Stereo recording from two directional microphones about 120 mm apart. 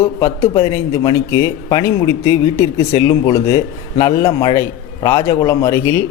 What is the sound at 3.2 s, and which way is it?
Speech, 55° left (ahead or behind).